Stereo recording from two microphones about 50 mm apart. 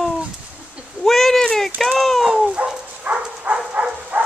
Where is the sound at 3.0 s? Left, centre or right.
Right.